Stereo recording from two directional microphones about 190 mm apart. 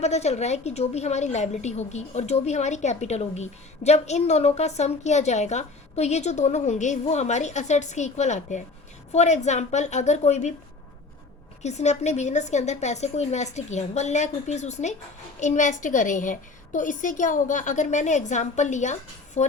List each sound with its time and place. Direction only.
0.0 s a woman's voice: 35° left (ahead or behind)
11.6 s a woman's voice: 35° left (ahead or behind)